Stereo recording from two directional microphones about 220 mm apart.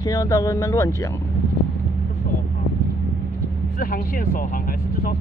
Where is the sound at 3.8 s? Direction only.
40° left (ahead or behind).